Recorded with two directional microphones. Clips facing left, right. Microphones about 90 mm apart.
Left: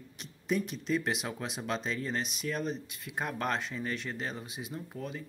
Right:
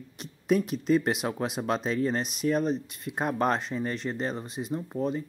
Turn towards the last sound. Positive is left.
turn(degrees=-35)  # may be behind; listen again after turning